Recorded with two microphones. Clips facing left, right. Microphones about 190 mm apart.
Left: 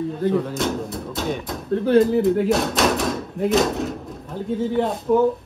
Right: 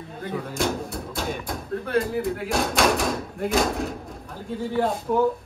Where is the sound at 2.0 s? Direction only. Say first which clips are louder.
Left 8 dB; centre (ahead or behind).